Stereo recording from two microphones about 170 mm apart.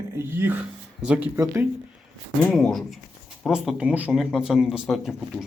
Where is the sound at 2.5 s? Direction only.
Centre (ahead or behind).